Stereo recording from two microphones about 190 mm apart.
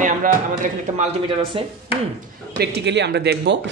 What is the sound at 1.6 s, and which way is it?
Speech, 30° right (ahead or behind).